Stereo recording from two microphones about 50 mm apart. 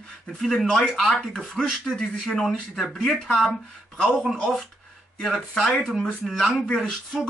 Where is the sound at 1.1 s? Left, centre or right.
Centre.